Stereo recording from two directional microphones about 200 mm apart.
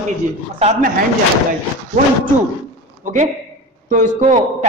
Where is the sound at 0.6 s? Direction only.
35° right (ahead or behind).